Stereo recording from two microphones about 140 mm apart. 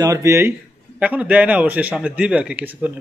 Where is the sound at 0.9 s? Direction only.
10° right (ahead or behind).